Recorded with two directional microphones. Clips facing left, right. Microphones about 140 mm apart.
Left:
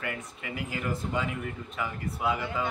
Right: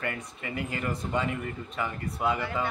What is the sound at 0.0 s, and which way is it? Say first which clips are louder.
Speech: right 2 dB; 5° left (ahead or behind).